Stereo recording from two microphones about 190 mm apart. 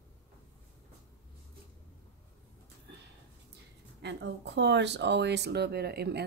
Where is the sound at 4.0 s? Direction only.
65° right (ahead or behind).